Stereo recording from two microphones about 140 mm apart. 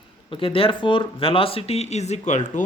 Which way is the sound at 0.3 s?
40° left (ahead or behind).